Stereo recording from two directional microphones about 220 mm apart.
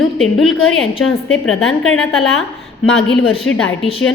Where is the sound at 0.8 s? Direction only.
70° left (ahead or behind).